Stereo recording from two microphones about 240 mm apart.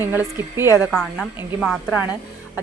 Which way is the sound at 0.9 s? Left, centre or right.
Centre.